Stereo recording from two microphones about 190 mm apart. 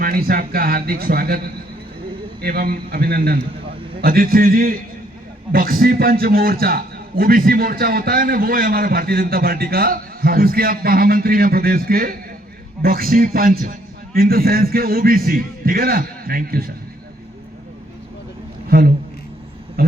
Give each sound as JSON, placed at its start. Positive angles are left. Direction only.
{"t": 0.0, "sound": "a man's voice", "side_deg": -50}
{"t": 2.4, "sound": "a man's voice", "side_deg": -50}
{"t": 18.7, "sound": "a man's voice", "side_deg": -50}